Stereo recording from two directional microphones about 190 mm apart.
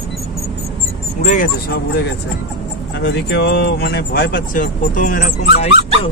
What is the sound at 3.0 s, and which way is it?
Speech, 65° left (ahead or behind).